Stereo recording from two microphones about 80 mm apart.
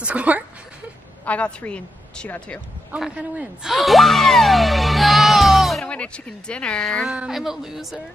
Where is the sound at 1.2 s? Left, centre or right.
Centre.